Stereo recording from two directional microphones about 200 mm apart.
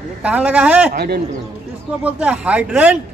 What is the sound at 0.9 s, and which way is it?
Speech, 50° right (ahead or behind).